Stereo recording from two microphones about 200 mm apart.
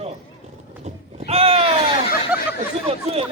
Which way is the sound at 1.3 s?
30° right (ahead or behind).